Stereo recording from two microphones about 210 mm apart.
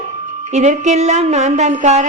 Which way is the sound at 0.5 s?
35° right (ahead or behind).